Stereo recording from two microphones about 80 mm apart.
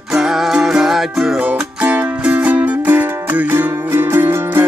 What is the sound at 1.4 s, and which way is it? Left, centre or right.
Music, centre.